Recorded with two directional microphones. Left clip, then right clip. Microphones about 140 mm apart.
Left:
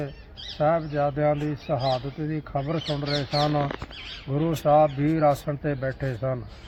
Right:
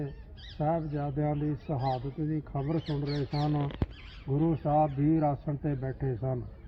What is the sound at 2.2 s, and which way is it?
Speech, 25° left (ahead or behind).